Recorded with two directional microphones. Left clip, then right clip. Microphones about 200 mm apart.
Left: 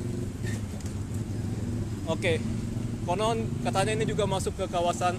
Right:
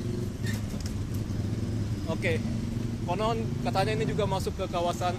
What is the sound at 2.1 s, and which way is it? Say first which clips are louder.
Speech: left 3 dB; 35° left (ahead or behind).